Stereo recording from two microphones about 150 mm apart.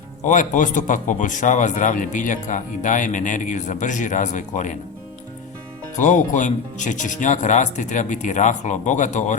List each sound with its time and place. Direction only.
0.3 s speech: 60° left (ahead or behind)
6.0 s speech: 55° left (ahead or behind)